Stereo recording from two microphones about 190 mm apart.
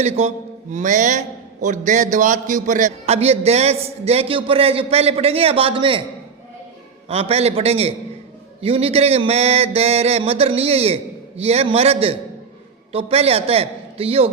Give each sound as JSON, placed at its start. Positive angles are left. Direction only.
{"t": 0.0, "sound": "a man's voice", "side_deg": -35}
{"t": 7.1, "sound": "a man's voice", "side_deg": -35}